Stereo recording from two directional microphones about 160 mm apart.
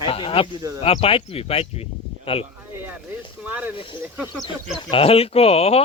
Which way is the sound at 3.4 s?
10° right (ahead or behind).